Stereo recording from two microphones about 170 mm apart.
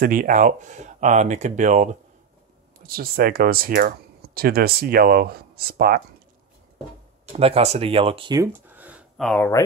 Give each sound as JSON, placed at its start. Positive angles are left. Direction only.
{"t": 0.0, "sound": "speech", "side_deg": -55}
{"t": 2.8, "sound": "speech", "side_deg": -60}
{"t": 7.3, "sound": "speech", "side_deg": -35}
{"t": 8.4, "sound": "a sound", "side_deg": -10}
{"t": 9.2, "sound": "speech", "side_deg": 5}